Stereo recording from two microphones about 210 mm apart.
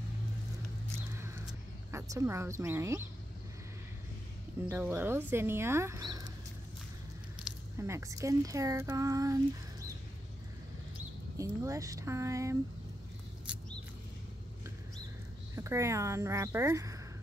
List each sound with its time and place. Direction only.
0.9 s a sound: 15° right (ahead or behind)
4.8 s speech: 10° right (ahead or behind)
7.4 s speech: 10° right (ahead or behind)
11.3 s speech: 15° right (ahead or behind)
13.5 s rodents: 5° right (ahead or behind)
15.5 s speech: 15° right (ahead or behind)